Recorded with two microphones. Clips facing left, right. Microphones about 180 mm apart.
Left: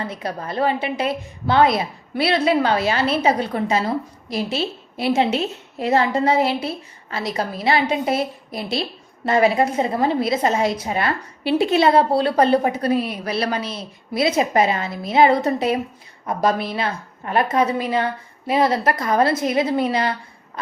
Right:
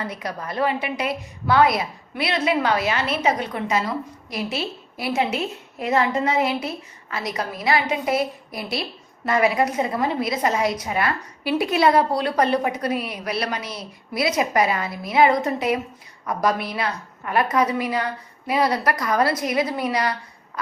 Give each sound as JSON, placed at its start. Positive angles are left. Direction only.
{"t": 0.0, "sound": "a woman's voice", "side_deg": 30}